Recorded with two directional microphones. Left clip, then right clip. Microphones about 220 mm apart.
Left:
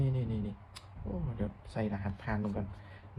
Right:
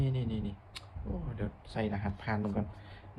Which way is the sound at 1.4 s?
25° left (ahead or behind).